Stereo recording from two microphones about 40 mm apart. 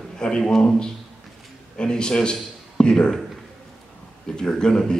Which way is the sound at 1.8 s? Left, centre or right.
Left.